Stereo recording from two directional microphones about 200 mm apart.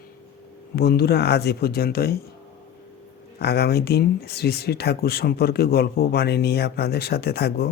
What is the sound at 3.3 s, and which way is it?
Speech, 55° left (ahead or behind).